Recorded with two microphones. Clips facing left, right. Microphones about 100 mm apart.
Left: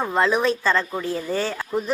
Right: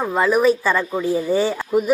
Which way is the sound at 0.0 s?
5° right (ahead or behind).